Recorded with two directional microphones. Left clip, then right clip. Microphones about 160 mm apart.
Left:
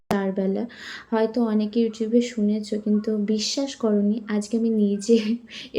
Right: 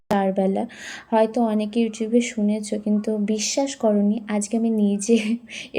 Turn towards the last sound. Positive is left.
turn(degrees=-20)  # may be behind; listen again after turning